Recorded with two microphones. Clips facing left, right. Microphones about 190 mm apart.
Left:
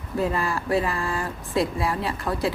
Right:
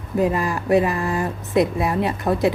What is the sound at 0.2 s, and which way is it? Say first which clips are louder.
Speech: right 4 dB; 15° right (ahead or behind).